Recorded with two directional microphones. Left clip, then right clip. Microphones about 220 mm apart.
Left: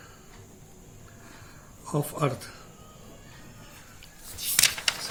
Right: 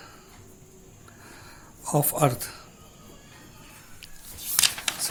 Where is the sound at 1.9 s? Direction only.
50° right (ahead or behind).